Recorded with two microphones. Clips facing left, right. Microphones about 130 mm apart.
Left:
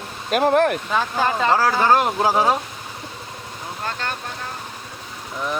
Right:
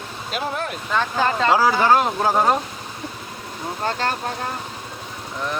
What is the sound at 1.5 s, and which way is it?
Speech, 10° right (ahead or behind).